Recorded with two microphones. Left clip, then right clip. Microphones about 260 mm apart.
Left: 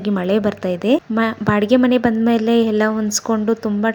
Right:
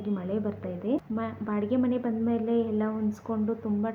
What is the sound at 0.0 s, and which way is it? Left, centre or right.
A woman's voice, left.